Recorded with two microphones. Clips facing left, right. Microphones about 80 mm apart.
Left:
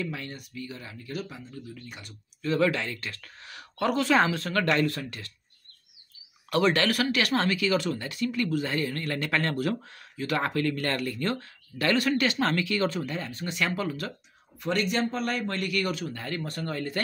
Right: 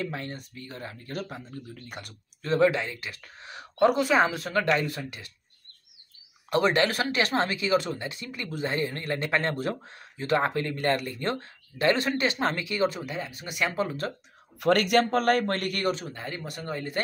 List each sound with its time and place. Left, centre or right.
0.0 s speech: right
2.5 s speech: right
6.5 s speech: right
14.6 s speech: right
15.9 s speech: right